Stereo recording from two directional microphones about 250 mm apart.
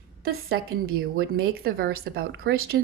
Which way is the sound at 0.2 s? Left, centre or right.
Right.